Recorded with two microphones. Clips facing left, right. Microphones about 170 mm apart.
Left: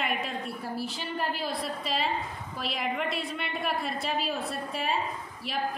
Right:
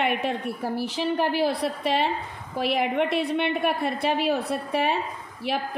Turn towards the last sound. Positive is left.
turn(degrees=-60)  # may be behind; listen again after turning